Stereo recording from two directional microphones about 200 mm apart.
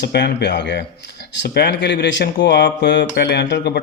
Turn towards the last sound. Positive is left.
turn(degrees=55)  # may be behind; listen again after turning